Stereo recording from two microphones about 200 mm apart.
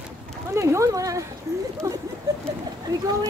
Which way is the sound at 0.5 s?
15° right (ahead or behind).